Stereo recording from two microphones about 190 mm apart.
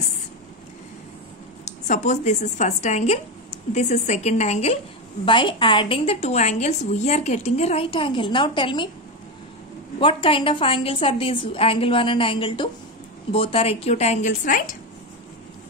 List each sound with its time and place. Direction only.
1.6 s a woman's voice: 40° left (ahead or behind)
9.9 s a woman's voice: 30° left (ahead or behind); by 14.8 s 45° left (ahead or behind)